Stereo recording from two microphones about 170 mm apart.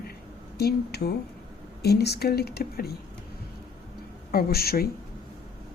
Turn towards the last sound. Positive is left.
turn(degrees=65)  # may be behind; listen again after turning